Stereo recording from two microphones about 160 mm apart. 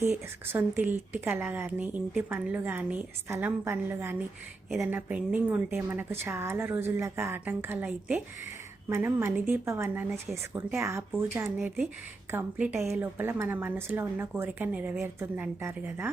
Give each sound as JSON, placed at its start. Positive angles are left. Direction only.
{"t": 0.0, "sound": "speech", "side_deg": -15}
{"t": 11.5, "sound": "speech", "side_deg": -5}